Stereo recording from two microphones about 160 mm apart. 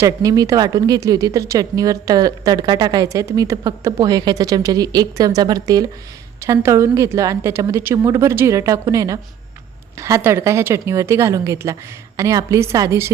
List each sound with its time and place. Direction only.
0.0 s a woman's voice: 20° right (ahead or behind)